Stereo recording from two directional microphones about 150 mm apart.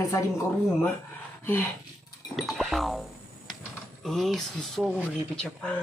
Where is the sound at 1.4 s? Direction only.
15° left (ahead or behind).